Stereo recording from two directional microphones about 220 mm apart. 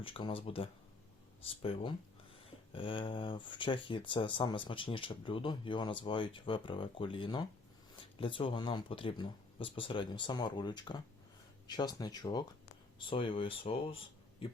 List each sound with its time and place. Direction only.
0.0 s speech: 25° left (ahead or behind)